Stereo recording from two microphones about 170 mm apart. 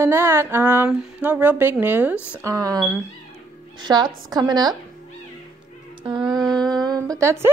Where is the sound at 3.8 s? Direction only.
25° right (ahead or behind).